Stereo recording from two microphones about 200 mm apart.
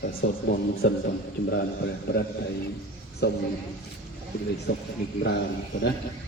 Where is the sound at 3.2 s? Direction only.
55° left (ahead or behind).